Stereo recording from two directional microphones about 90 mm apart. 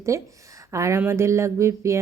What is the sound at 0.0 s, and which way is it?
Speech, 35° right (ahead or behind).